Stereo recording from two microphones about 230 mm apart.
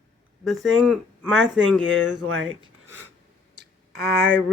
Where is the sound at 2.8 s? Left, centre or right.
Right.